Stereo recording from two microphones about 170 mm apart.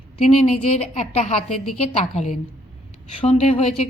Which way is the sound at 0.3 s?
40° left (ahead or behind).